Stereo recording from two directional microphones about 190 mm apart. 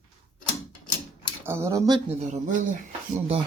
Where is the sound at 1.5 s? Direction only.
15° right (ahead or behind).